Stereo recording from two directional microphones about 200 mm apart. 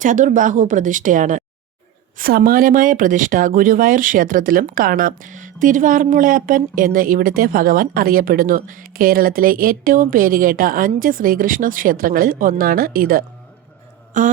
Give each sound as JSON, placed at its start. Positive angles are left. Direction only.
{"t": 0.0, "sound": "a woman's voice", "side_deg": -40}